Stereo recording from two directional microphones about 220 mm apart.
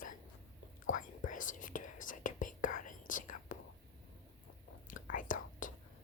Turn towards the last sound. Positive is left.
turn(degrees=35)  # may be behind; listen again after turning